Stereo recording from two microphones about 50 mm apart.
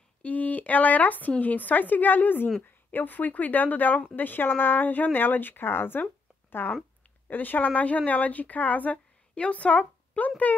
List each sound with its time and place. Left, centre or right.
0.2 s speech: left
6.6 s speech: left